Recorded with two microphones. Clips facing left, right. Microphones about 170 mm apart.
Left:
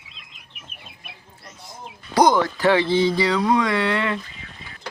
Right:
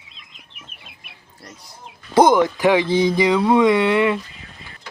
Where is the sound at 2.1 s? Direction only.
20° right (ahead or behind).